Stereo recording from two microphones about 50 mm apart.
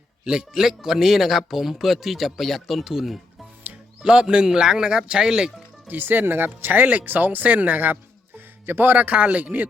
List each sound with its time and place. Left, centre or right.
0.6 s speech: centre
4.0 s speech: centre
5.9 s speech: right